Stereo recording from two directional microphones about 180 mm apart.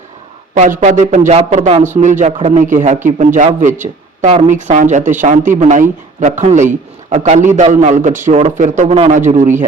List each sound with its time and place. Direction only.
0.5 s a man's voice: 40° right (ahead or behind)